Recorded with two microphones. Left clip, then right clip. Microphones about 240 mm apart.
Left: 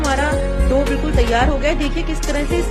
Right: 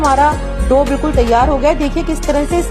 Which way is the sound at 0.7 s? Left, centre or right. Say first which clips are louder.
Right 7 dB; centre.